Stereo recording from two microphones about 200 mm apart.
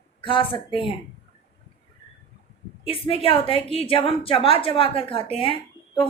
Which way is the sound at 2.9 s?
25° left (ahead or behind).